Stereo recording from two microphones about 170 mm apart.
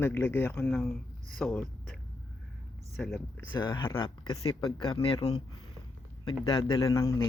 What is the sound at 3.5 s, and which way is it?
A man's voice, 30° left (ahead or behind).